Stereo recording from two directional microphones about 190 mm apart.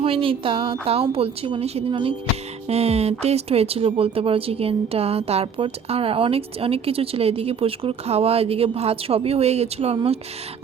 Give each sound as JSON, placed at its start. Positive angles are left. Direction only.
{"t": 0.0, "sound": "speech", "side_deg": -30}